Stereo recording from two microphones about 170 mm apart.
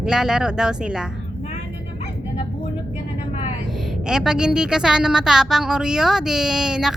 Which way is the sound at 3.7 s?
Centre (ahead or behind).